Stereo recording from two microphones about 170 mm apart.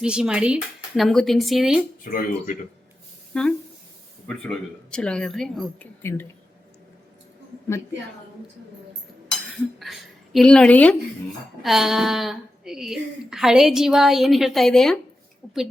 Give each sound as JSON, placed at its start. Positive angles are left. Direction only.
{"t": 0.0, "sound": "a woman's voice", "side_deg": -5}
{"t": 2.0, "sound": "speech", "side_deg": 55}
{"t": 3.3, "sound": "a woman's voice", "side_deg": 5}
{"t": 6.0, "sound": "speech", "side_deg": 15}
{"t": 9.5, "sound": "a woman's voice", "side_deg": 0}